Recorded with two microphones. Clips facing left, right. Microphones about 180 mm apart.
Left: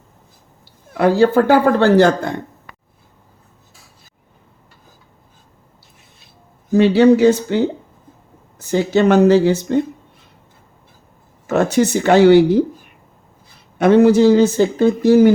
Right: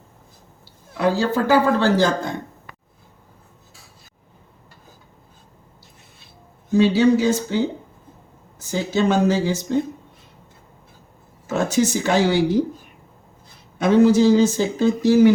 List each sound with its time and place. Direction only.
0.9 s speech: 60° left (ahead or behind)
6.7 s speech: 65° left (ahead or behind)
11.4 s speech: 65° left (ahead or behind)
13.7 s speech: 65° left (ahead or behind)